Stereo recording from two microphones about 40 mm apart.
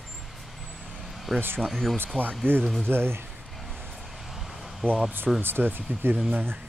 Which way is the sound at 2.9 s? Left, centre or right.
Right.